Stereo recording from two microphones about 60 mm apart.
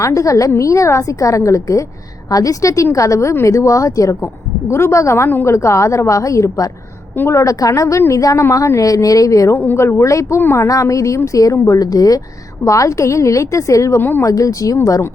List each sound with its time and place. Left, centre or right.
0.0 s a woman's voice: left
4.7 s a woman's voice: left
9.7 s a woman's voice: left
12.6 s a woman's voice: left